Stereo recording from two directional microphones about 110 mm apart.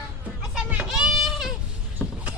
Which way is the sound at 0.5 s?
10° right (ahead or behind).